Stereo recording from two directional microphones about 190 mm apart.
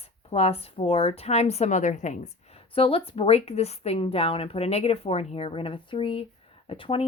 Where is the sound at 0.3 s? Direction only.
30° left (ahead or behind).